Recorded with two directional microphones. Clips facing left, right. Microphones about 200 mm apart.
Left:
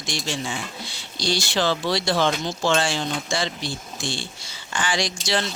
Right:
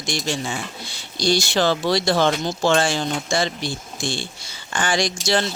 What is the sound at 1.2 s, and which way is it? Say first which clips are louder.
Speech: right 4 dB; 50° right (ahead or behind).